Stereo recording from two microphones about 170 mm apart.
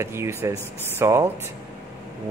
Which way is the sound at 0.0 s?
15° right (ahead or behind).